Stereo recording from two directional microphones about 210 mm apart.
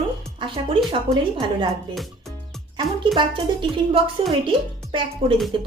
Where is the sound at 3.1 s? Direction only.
25° right (ahead or behind).